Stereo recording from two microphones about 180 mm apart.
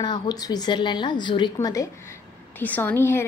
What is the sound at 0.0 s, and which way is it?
A woman's voice, 20° left (ahead or behind).